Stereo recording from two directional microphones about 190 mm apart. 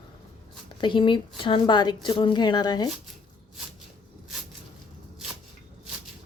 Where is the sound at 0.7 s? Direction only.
25° left (ahead or behind).